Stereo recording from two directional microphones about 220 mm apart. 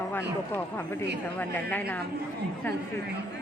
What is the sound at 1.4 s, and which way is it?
Speech, 10° left (ahead or behind).